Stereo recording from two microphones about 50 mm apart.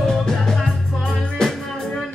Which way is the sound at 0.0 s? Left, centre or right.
Centre.